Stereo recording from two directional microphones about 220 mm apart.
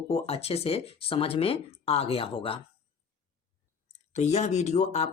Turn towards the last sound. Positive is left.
turn(degrees=30)  # may be behind; listen again after turning